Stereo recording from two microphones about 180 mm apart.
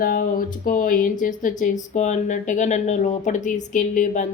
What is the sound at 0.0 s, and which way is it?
Speech, 55° left (ahead or behind).